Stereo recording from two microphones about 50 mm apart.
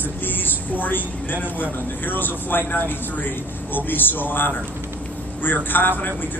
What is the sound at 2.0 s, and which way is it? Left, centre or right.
A man's voice, left.